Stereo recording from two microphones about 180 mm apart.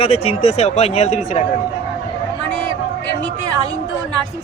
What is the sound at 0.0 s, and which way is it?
Speech, 35° left (ahead or behind).